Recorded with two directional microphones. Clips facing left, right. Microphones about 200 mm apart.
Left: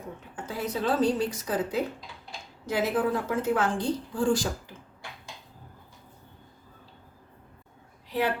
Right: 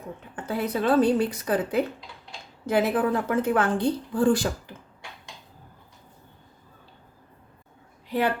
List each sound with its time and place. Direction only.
0.3 s a woman's voice: 60° right (ahead or behind)